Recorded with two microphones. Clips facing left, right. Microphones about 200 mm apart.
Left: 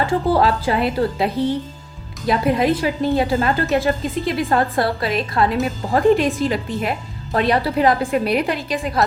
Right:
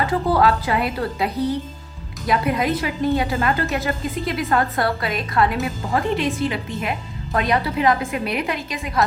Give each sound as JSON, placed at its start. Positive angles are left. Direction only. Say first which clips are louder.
{"t": 0.0, "sound": "a woman's voice", "louder": "left 1 dB", "side_deg": 30}
{"t": 5.9, "sound": "a woman's voice", "louder": "left 7 dB", "side_deg": 40}